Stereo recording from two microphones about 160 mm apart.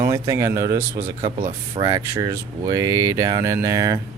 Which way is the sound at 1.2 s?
35° right (ahead or behind).